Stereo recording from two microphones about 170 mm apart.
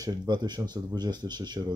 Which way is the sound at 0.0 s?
25° right (ahead or behind).